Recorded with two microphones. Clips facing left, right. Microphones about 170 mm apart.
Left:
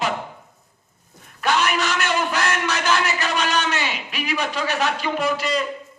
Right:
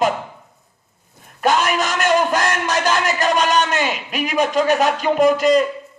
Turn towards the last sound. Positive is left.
turn(degrees=-45)  # may be behind; listen again after turning